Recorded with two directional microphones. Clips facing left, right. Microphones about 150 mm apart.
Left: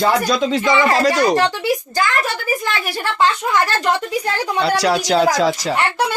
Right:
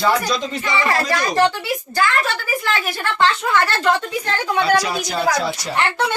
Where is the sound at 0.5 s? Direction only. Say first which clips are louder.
Left 6 dB; 90° left.